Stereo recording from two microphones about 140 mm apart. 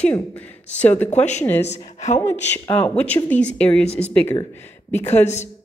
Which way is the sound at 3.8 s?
45° left (ahead or behind).